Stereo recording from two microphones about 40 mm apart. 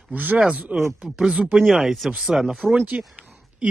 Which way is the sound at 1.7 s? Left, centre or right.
Centre.